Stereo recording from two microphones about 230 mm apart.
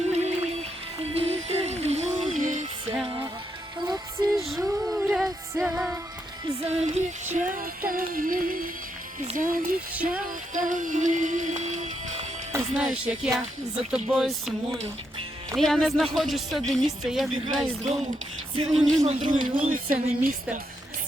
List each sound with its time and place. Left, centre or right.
0.1 s music: right
3.8 s music: centre
4.4 s music: centre
6.7 s music: right
9.2 s speech: right
9.9 s speech: centre
10.2 s music: right
12.5 s music: centre
13.9 s speech: centre
18.5 s music: right
19.0 s speech: right